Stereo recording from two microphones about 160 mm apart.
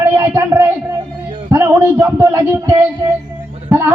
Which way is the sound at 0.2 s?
15° right (ahead or behind).